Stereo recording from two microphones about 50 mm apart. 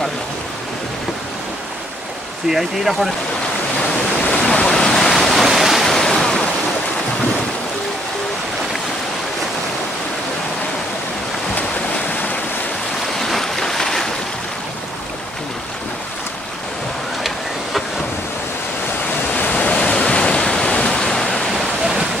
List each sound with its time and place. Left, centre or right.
2.5 s speech: centre
4.3 s waves: left
4.6 s waves: centre
5.9 s waves: centre
12.1 s waves: left
13.2 s waves: centre
19.5 s waves: left